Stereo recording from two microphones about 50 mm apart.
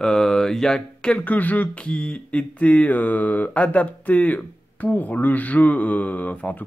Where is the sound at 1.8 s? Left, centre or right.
Left.